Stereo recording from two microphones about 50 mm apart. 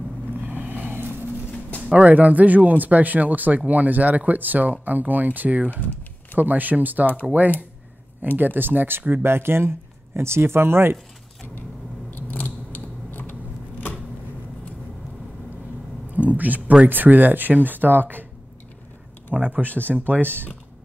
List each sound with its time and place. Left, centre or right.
0.5 s vehicle: right
2.0 s speech: right
8.4 s speech: right
9.2 s speech: right
12.1 s scissors: left
16.1 s a sound: right
16.8 s speech: right
19.3 s speech: right
20.2 s speech: right